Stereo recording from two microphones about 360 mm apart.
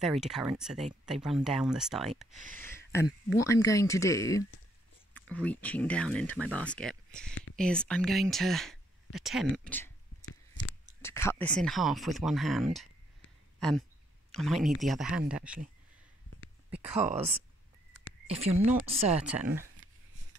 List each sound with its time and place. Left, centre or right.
0.0 s speech: centre
11.0 s speech: centre
18.2 s speech: centre